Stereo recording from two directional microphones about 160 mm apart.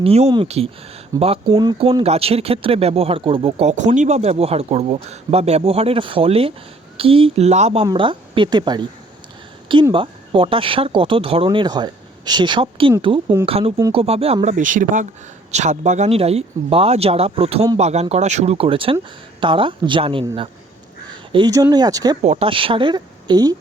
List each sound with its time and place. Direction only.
0.0 s speech: 40° right (ahead or behind)
1.1 s a woman's voice: 20° right (ahead or behind)
1.9 s a woman's voice: 40° right (ahead or behind)
9.9 s speech: 35° right (ahead or behind)
14.4 s a woman's voice: 55° right (ahead or behind); by 22.2 s 25° right (ahead or behind)
22.2 s speech: 40° right (ahead or behind)